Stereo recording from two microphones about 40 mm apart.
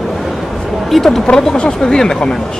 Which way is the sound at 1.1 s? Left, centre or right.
Left.